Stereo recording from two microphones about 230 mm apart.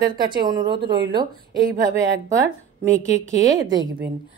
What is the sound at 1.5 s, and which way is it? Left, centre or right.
Speech, right.